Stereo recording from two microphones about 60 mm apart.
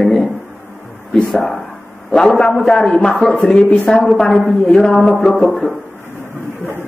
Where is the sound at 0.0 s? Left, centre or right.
Centre.